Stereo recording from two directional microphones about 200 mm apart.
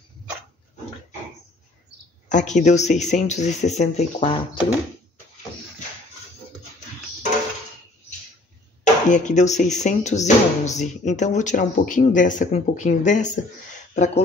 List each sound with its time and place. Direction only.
2.2 s speech: 35° left (ahead or behind)
9.1 s speech: 35° left (ahead or behind)